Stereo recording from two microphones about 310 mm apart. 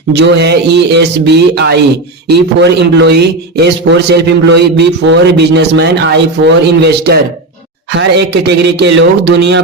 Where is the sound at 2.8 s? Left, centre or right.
Right.